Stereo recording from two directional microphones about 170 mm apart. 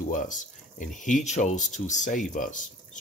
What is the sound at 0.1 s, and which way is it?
Speech, 50° left (ahead or behind).